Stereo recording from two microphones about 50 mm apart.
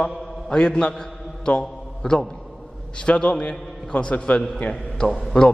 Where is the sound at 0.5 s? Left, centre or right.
Centre.